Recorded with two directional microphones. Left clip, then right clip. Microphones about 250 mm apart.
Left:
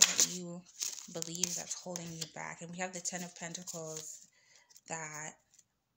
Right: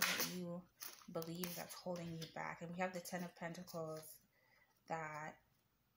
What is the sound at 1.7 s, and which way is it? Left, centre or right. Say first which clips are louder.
Speech: left 4 dB; left.